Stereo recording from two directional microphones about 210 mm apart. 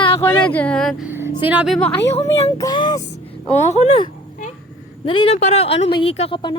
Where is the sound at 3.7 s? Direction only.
30° left (ahead or behind).